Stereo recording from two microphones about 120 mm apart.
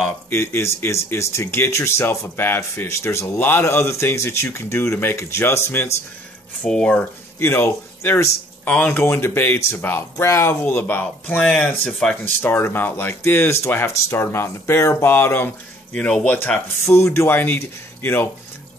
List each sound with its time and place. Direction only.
0.3 s speech: 20° left (ahead or behind)
6.6 s speech: 10° left (ahead or behind)
7.3 s speech: 20° left (ahead or behind)
16.3 s speech: 20° left (ahead or behind)